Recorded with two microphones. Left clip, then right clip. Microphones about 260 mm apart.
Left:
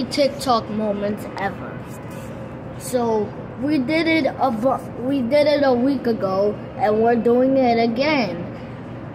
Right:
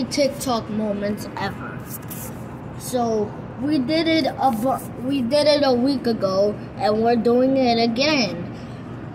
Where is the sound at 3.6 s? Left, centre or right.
Centre.